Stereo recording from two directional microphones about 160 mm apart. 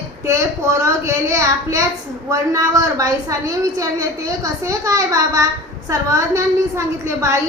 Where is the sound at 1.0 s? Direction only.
20° right (ahead or behind).